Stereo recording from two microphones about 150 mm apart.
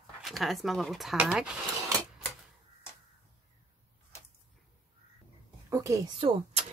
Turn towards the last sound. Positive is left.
turn(degrees=-35)  # may be behind; listen again after turning